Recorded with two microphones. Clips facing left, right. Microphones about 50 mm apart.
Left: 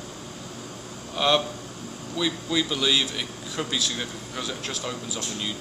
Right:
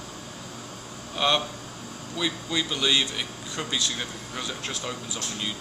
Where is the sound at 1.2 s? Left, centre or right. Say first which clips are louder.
Left 2 dB; centre.